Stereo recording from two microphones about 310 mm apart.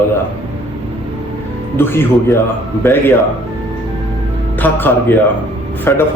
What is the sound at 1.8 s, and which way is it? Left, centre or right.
Speech, centre.